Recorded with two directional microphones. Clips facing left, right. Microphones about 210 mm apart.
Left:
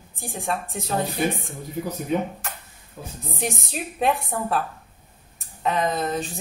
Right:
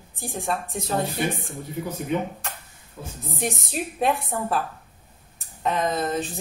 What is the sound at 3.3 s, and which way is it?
A woman's voice, centre (ahead or behind).